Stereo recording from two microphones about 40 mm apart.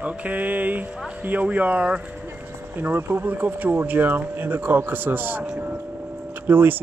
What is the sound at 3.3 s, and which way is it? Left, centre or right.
A man's voice, right.